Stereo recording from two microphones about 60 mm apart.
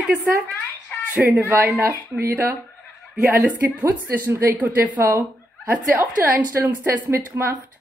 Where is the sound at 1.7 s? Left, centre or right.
Right.